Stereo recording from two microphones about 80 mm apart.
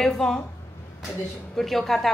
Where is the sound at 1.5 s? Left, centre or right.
Centre.